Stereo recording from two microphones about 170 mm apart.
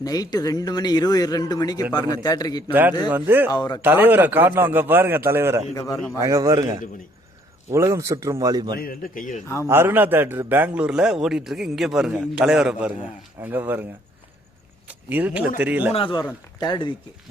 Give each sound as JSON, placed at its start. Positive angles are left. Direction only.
{"t": 0.0, "sound": "a man's voice", "side_deg": 20}
{"t": 3.1, "sound": "a man's voice", "side_deg": -10}
{"t": 3.5, "sound": "a man's voice", "side_deg": 25}
{"t": 3.8, "sound": "a man's voice", "side_deg": -10}
{"t": 5.7, "sound": "a man's voice", "side_deg": 20}
{"t": 6.1, "sound": "a man's voice", "side_deg": -20}
{"t": 8.7, "sound": "a man's voice", "side_deg": 60}
{"t": 9.6, "sound": "a man's voice", "side_deg": -15}
{"t": 14.8, "sound": "a man's voice", "side_deg": -10}
{"t": 15.9, "sound": "a man's voice", "side_deg": 30}